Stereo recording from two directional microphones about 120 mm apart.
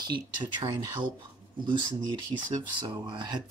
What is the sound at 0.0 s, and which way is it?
Speech, 40° right (ahead or behind).